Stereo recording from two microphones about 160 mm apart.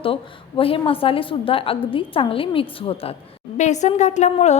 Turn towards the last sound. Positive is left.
turn(degrees=45)  # may be behind; listen again after turning